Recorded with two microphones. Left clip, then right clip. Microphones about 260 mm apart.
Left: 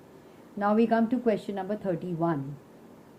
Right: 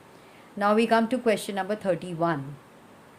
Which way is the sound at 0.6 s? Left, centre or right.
Right.